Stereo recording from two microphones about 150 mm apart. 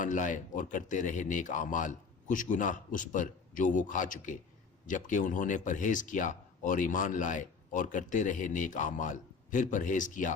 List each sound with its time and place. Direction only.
0.0 s speech: 60° left (ahead or behind)